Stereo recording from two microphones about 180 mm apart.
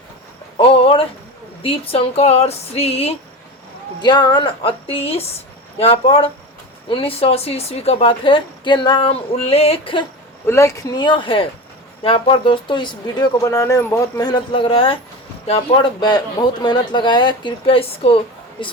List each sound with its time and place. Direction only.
0.5 s a sound: 30° left (ahead or behind)
1.6 s speech: 30° left (ahead or behind)
10.4 s speech: 15° left (ahead or behind); by 18.2 s 30° left (ahead or behind)